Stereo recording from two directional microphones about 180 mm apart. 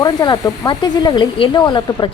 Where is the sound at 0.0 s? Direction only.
20° left (ahead or behind).